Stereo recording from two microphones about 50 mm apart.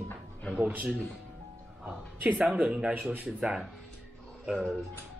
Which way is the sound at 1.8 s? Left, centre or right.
Centre.